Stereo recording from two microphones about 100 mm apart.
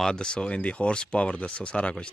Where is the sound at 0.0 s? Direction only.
10° left (ahead or behind).